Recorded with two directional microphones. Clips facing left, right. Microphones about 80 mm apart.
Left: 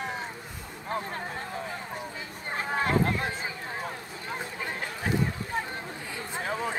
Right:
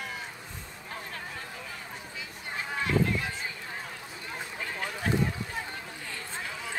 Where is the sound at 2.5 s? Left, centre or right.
Left.